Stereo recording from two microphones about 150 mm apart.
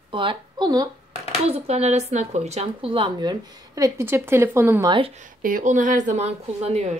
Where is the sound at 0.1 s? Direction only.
35° right (ahead or behind).